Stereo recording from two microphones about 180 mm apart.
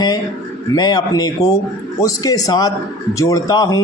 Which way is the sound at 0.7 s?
20° left (ahead or behind).